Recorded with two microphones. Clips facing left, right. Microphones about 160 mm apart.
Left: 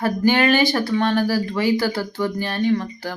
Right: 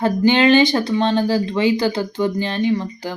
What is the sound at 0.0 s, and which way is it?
Speech, 20° right (ahead or behind).